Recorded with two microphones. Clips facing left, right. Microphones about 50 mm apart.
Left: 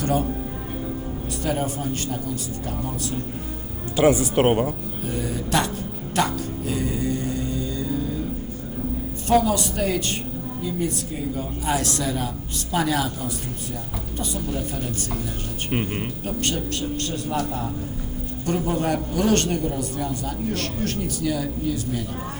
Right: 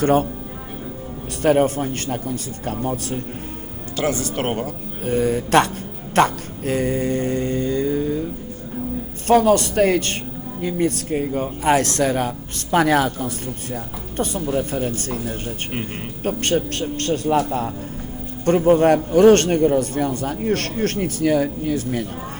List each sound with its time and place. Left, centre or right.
0.0 s a man's voice: right
1.4 s a man's voice: right
3.9 s speech: centre
5.0 s a man's voice: right
6.1 s mantra: right
9.2 s a man's voice: right
16.2 s a man's voice: right